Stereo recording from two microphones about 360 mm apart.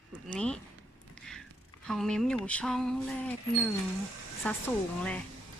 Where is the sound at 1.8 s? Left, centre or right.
Centre.